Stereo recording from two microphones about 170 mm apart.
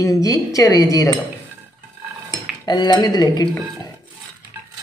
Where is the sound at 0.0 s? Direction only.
20° left (ahead or behind).